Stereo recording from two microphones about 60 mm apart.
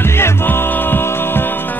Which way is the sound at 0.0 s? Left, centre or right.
Left.